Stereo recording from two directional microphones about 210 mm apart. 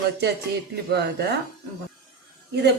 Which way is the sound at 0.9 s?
50° right (ahead or behind).